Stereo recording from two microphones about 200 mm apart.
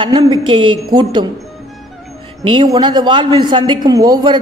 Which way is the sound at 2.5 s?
25° right (ahead or behind).